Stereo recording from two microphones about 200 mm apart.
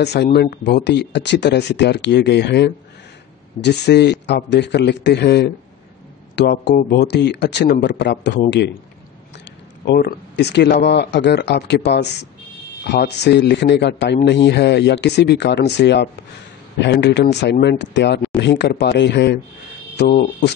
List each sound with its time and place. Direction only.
0.0 s speech: 55° left (ahead or behind)
9.8 s speech: 55° left (ahead or behind)